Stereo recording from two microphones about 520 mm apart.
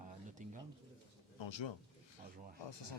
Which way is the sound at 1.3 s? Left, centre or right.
Left.